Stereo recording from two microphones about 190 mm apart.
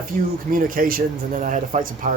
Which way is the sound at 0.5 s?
45° right (ahead or behind).